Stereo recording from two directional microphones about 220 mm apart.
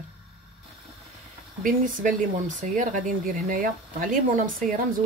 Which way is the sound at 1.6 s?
40° right (ahead or behind).